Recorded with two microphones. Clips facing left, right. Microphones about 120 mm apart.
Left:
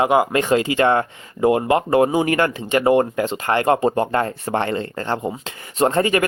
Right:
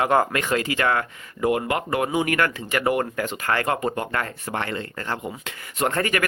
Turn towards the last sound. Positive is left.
turn(degrees=25)  # may be behind; listen again after turning